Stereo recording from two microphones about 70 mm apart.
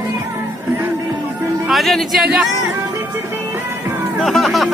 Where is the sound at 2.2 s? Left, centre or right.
Centre.